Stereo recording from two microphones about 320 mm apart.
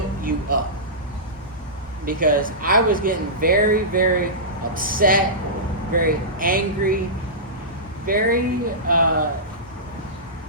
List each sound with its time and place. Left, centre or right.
0.2 s a sound: right
2.0 s speech: right
8.0 s speech: right
8.9 s speech: right